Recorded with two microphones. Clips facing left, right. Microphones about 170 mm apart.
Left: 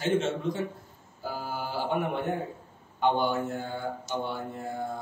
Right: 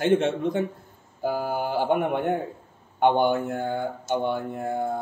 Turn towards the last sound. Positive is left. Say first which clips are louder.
# right 6 dB
turn(degrees=-60)  # may be behind; listen again after turning